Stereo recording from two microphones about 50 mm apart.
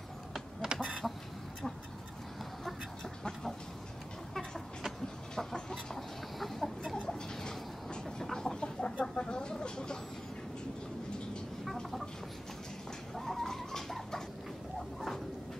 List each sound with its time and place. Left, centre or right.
0.3 s a sound: centre
0.8 s chicken: centre
5.3 s chicken: centre
7.0 s chicken: centre
11.6 s chicken: centre
13.1 s cat: centre
15.0 s a sound: centre